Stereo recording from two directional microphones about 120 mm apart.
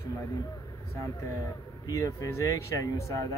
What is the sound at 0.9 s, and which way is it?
Speech, 25° left (ahead or behind).